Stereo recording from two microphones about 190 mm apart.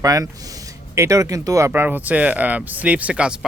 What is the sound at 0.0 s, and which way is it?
Speech, 20° right (ahead or behind).